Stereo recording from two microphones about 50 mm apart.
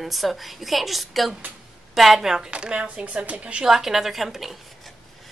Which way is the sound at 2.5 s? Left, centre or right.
Right.